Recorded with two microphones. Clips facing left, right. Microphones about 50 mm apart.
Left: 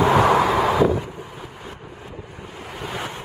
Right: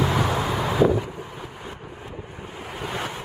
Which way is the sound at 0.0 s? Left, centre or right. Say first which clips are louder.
Left 7 dB; left.